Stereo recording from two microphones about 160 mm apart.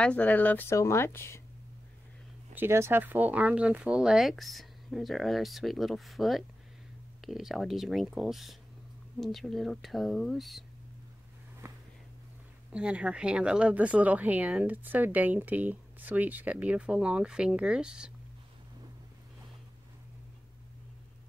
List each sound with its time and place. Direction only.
0.0 s speech: 10° left (ahead or behind)
2.5 s speech: 15° right (ahead or behind)
11.6 s a sound: 15° right (ahead or behind)
12.7 s speech: 5° right (ahead or behind)